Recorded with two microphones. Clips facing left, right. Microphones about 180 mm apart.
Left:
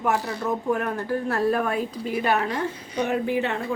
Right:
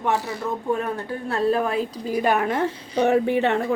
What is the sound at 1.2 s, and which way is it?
A woman's voice, 25° right (ahead or behind).